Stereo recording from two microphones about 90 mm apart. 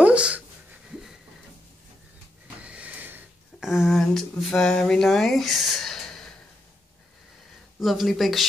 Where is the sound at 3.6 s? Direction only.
5° right (ahead or behind).